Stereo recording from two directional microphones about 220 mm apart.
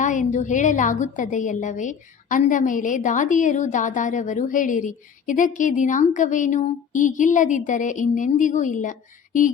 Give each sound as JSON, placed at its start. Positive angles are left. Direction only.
{"t": 0.0, "sound": "a woman's voice", "side_deg": 35}